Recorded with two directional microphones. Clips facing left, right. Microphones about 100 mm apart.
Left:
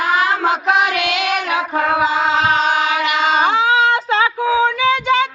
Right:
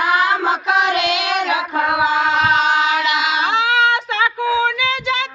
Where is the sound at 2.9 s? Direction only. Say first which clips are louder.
Even; 50° left (ahead or behind).